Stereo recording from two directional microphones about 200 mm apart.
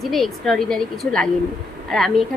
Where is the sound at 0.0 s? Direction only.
Centre (ahead or behind).